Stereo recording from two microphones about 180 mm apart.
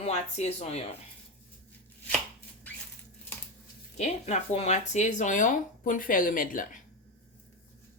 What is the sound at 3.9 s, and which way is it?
Speech, 35° left (ahead or behind).